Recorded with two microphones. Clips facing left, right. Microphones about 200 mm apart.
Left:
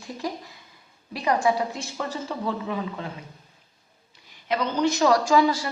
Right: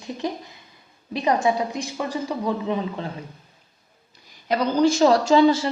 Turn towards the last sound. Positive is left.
turn(degrees=-25)  # may be behind; listen again after turning